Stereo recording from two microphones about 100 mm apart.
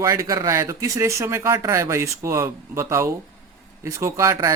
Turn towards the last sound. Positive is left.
turn(degrees=-30)  # may be behind; listen again after turning